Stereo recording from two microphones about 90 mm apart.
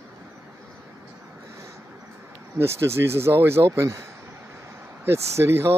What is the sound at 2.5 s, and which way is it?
Speech, 30° right (ahead or behind).